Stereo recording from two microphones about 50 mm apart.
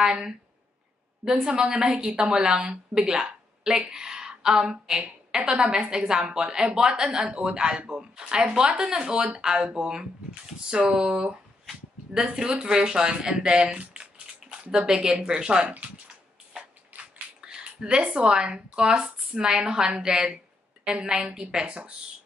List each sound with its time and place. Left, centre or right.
0.0 s a woman's voice: centre
16.9 s a sound: right
17.5 s a woman's voice: centre